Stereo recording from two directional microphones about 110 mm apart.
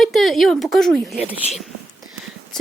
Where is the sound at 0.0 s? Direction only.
Centre (ahead or behind).